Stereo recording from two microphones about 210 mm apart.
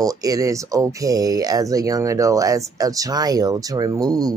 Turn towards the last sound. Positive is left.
turn(degrees=-20)  # may be behind; listen again after turning